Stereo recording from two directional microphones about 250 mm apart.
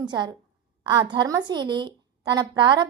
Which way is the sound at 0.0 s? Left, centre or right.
Centre.